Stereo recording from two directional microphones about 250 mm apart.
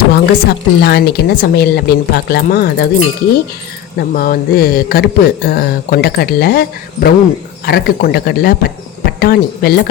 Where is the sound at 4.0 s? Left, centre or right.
Left.